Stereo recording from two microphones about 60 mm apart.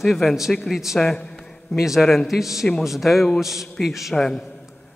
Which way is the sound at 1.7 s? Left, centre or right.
Centre.